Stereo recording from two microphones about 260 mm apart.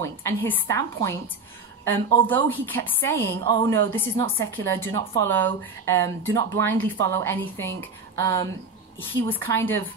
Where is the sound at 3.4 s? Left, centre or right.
Centre.